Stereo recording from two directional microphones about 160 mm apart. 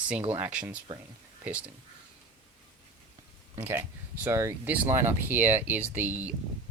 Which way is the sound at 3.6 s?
15° right (ahead or behind).